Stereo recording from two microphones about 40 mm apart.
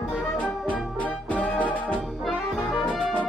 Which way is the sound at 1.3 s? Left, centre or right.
Left.